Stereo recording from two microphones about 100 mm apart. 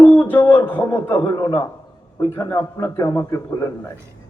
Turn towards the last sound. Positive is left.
turn(degrees=30)  # may be behind; listen again after turning